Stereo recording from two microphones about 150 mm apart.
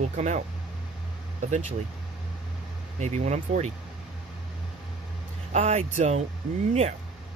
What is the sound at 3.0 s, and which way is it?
Speech, 50° right (ahead or behind).